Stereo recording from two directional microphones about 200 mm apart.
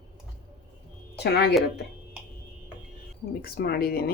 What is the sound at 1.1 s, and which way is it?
Speech, 55° left (ahead or behind).